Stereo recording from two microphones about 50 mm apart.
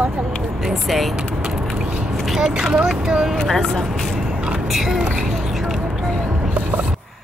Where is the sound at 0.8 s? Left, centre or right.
Centre.